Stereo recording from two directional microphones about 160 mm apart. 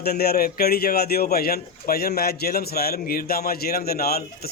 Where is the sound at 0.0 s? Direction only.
80° left.